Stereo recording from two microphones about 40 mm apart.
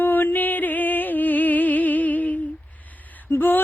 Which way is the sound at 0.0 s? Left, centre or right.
Left.